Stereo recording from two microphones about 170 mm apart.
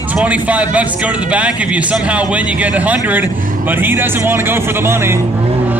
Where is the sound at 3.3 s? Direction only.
55° right (ahead or behind).